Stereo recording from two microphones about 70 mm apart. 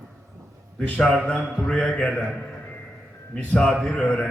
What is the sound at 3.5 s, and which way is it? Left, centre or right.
Speech, centre.